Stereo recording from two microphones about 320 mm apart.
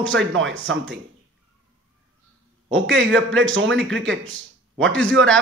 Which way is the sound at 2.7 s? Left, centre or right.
Right.